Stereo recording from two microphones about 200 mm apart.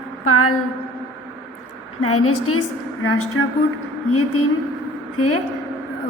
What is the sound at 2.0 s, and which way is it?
Speech, 90° left.